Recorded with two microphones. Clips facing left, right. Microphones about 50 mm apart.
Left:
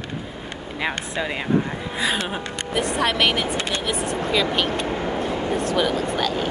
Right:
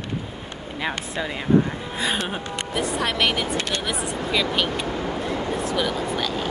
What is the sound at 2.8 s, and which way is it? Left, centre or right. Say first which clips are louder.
Speech: left 3 dB; centre.